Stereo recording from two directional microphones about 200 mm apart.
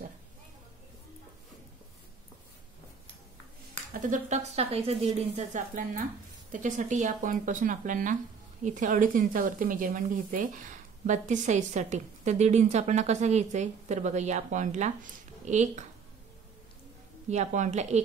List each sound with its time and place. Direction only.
3.9 s a woman's voice: 40° right (ahead or behind)
17.3 s a woman's voice: 35° right (ahead or behind)